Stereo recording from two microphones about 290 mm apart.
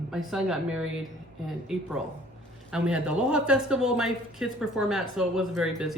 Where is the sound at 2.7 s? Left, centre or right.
Centre.